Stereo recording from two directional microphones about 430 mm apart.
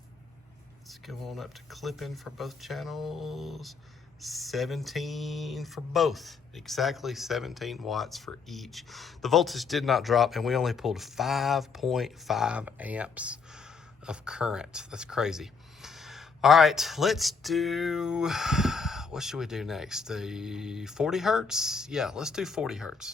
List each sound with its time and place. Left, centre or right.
0.9 s speech: centre